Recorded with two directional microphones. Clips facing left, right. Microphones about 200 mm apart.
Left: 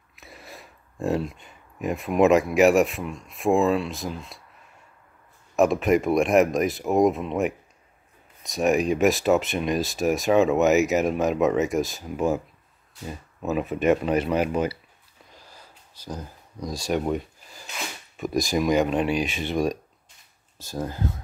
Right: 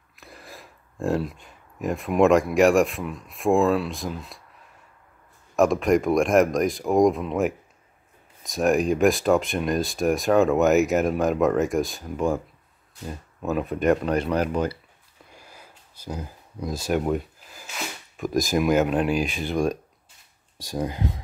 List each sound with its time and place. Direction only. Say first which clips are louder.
0.1 s speech: even; centre (ahead or behind)
5.6 s speech: even; centre (ahead or behind)
15.3 s a sound: right 1 dB; 10° right (ahead or behind)
18.1 s speech: right 1 dB; centre (ahead or behind)
20.5 s speech: right 2 dB; 15° right (ahead or behind)